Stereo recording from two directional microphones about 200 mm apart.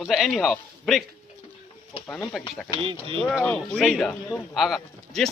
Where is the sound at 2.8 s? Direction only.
25° right (ahead or behind).